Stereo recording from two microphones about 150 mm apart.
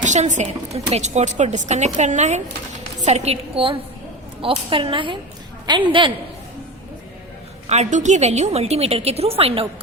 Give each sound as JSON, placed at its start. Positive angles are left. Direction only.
{"t": 0.0, "sound": "a woman's voice", "side_deg": -55}
{"t": 7.7, "sound": "a woman's voice", "side_deg": -50}